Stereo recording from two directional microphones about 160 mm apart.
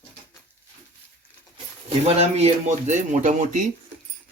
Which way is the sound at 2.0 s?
40° right (ahead or behind).